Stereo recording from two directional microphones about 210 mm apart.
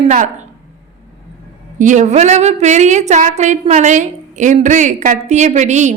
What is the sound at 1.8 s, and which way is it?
A woman's voice, 35° right (ahead or behind).